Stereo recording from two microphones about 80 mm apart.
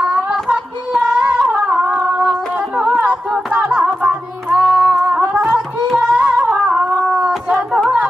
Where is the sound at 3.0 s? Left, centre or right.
Centre.